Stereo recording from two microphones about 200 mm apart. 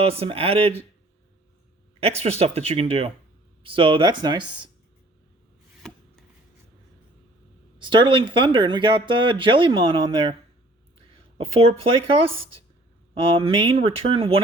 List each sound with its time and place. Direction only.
0.0 s speech: 30° right (ahead or behind)
2.0 s speech: 30° right (ahead or behind)
7.8 s speech: 25° right (ahead or behind)